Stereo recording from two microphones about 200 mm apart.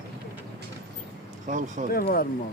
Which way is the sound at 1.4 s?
40° right (ahead or behind).